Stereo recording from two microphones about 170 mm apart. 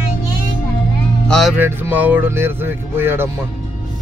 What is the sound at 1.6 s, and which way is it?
Speech, 10° right (ahead or behind).